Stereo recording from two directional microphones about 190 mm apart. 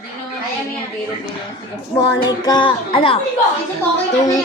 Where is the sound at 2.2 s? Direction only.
20° left (ahead or behind).